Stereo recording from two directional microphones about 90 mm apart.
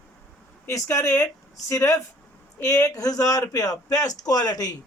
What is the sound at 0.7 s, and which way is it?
A man's voice, 35° left (ahead or behind).